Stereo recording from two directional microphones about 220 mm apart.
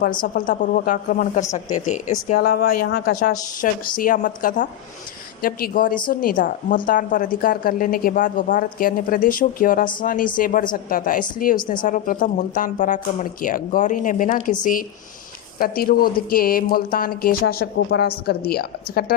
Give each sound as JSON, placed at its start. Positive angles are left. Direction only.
{"t": 0.2, "sound": "a woman's voice", "side_deg": 40}
{"t": 2.6, "sound": "a woman's voice", "side_deg": 45}
{"t": 11.5, "sound": "a woman's voice", "side_deg": 20}
{"t": 11.9, "sound": "a woman's voice", "side_deg": 35}